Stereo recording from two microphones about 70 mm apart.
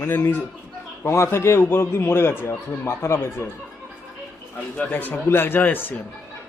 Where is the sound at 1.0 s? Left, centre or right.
Left.